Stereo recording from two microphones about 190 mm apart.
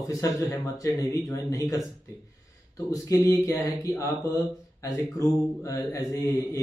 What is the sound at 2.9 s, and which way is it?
A man's voice, 20° left (ahead or behind).